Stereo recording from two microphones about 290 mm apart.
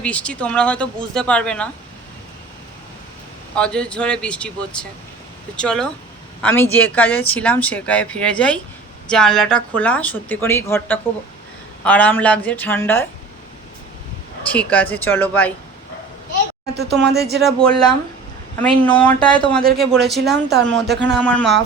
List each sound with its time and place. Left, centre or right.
0.0 s speech: centre
3.5 s speech: centre
14.4 s speech: centre
16.7 s speech: right
17.4 s speech: centre
18.9 s speech: centre
19.2 s speech: centre
19.8 s speech: centre
20.3 s speech: right
20.7 s speech: centre
20.9 s speech: right
21.2 s speech: centre